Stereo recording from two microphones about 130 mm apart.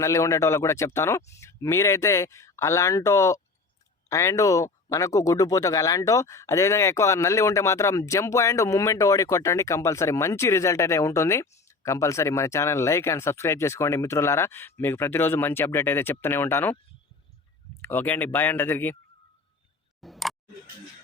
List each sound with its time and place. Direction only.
0.0 s speech: 25° left (ahead or behind)
17.8 s speech: 15° left (ahead or behind)
20.0 s a sound: centre (ahead or behind)